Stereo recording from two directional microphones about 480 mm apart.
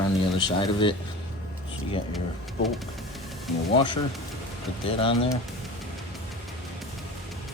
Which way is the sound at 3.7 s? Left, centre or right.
Centre.